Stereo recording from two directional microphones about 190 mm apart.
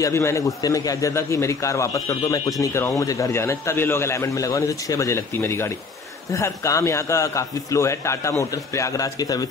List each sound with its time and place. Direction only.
0.0 s a man's voice: 15° left (ahead or behind)